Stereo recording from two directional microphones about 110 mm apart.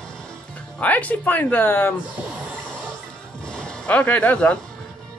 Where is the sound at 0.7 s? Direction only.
15° left (ahead or behind).